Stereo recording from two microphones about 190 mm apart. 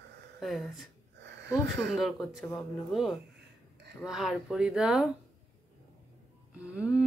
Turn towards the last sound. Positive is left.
turn(degrees=-5)  # may be behind; listen again after turning